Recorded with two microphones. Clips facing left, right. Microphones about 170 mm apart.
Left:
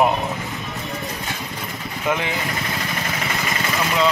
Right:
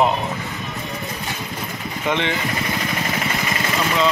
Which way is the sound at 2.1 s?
5° left (ahead or behind).